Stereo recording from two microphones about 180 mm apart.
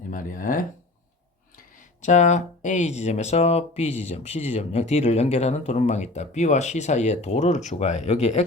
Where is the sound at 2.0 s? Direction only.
40° left (ahead or behind).